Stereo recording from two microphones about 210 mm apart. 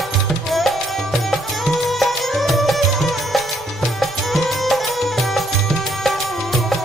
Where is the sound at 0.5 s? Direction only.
Centre (ahead or behind).